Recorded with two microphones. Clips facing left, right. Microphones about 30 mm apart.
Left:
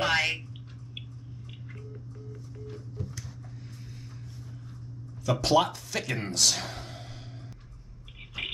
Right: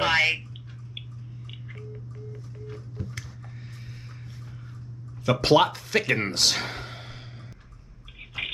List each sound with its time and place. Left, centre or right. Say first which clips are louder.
0.0 s bathtub: right 4 dB; centre
2.6 s organ: right 1 dB; right
5.4 s speech: right 4 dB; right
8.4 s a sound: right 3 dB; centre